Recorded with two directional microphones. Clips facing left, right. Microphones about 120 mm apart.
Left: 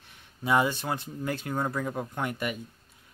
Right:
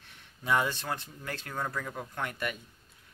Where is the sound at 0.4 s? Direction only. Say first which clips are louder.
Left 4 dB; 10° left (ahead or behind).